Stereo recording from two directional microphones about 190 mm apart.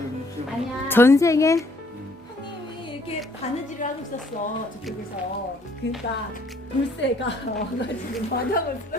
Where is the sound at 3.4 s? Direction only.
35° left (ahead or behind).